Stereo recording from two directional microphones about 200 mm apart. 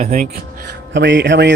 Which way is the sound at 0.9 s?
65° right (ahead or behind).